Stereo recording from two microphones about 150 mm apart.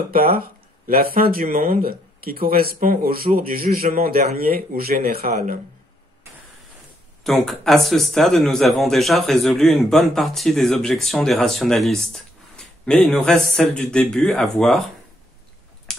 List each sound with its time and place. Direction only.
0.1 s speech: 75° right (ahead or behind)
7.2 s a man's voice: centre (ahead or behind)